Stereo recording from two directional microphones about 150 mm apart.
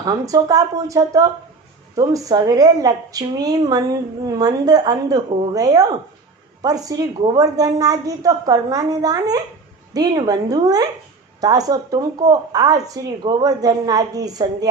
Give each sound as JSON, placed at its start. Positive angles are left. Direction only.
{"t": 0.0, "sound": "speech", "side_deg": -25}